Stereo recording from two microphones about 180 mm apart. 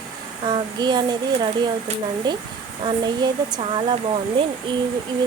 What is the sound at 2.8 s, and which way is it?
Speech, 25° right (ahead or behind).